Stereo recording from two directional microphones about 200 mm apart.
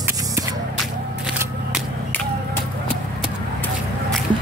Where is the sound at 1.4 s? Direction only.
5° right (ahead or behind).